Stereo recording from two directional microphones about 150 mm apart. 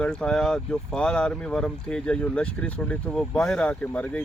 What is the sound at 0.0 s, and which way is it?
Speech, 5° left (ahead or behind).